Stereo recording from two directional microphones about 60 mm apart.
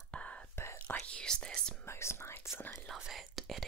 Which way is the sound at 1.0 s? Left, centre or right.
Centre.